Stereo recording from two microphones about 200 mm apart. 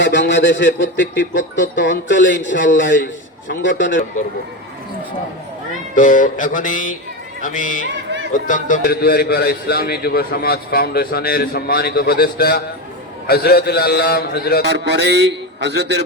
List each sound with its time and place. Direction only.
0.0 s a man's voice: 65° left (ahead or behind)
5.9 s mantra: 40° left (ahead or behind)
8.3 s a man's voice: 40° left (ahead or behind)
14.7 s a man's voice: 60° right (ahead or behind)